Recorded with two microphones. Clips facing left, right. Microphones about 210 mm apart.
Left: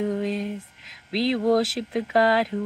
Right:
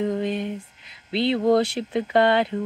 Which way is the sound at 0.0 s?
Centre (ahead or behind).